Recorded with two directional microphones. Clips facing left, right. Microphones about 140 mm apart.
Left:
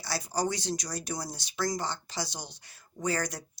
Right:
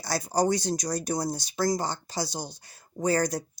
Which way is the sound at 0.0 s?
45° right (ahead or behind).